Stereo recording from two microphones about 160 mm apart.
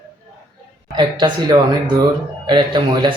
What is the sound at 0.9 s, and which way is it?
Speech, 30° right (ahead or behind).